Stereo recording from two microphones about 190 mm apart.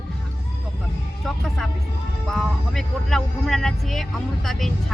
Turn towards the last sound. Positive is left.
turn(degrees=0)  # may be behind; listen again after turning